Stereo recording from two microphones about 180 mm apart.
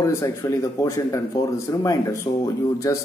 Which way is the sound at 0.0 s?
15° left (ahead or behind).